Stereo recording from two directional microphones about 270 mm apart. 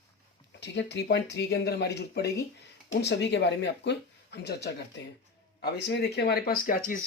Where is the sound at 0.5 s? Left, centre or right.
Left.